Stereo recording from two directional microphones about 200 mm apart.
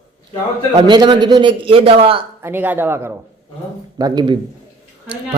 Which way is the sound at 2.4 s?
10° right (ahead or behind).